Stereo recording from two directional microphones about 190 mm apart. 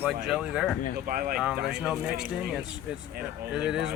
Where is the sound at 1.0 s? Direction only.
50° right (ahead or behind).